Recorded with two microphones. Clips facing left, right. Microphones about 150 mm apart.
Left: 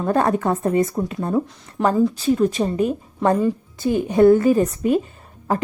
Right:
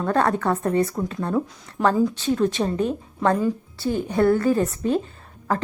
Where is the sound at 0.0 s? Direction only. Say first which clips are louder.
Left 2 dB; 15° left (ahead or behind).